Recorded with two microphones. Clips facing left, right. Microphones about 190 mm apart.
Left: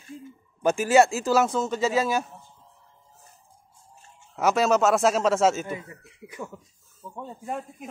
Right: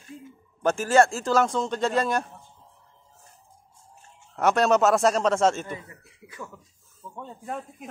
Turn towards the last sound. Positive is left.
turn(degrees=0)  # may be behind; listen again after turning